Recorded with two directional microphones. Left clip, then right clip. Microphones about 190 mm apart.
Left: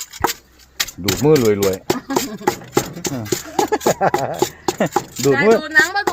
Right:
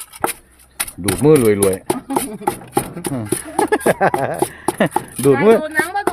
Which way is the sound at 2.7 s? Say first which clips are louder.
Left 1 dB; 35° right (ahead or behind).